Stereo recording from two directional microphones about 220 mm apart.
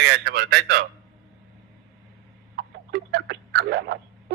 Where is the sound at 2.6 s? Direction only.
50° right (ahead or behind).